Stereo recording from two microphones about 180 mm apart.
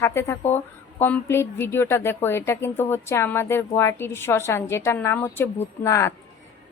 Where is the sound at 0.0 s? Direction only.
15° left (ahead or behind).